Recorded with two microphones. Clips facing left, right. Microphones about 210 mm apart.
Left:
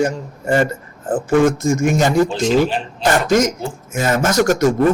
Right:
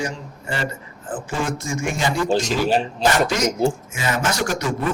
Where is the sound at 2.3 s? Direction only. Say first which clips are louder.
Left 3 dB; 40° right (ahead or behind).